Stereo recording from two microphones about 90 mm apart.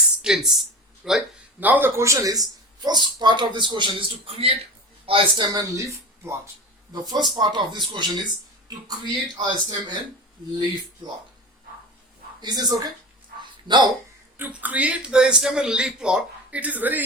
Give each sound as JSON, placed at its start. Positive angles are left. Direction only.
{"t": 0.2, "sound": "speech", "side_deg": -5}
{"t": 1.6, "sound": "a man's voice", "side_deg": -20}
{"t": 2.0, "sound": "a man's voice", "side_deg": -35}
{"t": 5.5, "sound": "speech", "side_deg": -35}
{"t": 6.9, "sound": "speech", "side_deg": -50}
{"t": 12.4, "sound": "speech", "side_deg": -50}
{"t": 13.4, "sound": "dog", "side_deg": -55}
{"t": 14.5, "sound": "a man's voice", "side_deg": -15}